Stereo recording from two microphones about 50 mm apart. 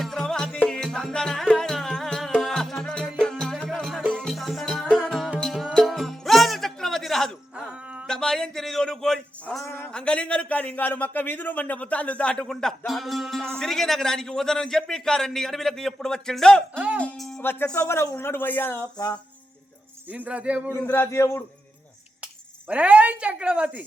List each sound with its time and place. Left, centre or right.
0.0 s music: centre
4.9 s music: centre
5.8 s music: centre
8.0 s a sound: centre
9.6 s a sound: left
9.9 s a man's voice: left
12.3 s a man's voice: centre
17.4 s speech: left
17.7 s speech: left
20.1 s a woman's voice: right
20.8 s speech: left
21.1 s a man's voice: left
22.7 s a woman's voice: right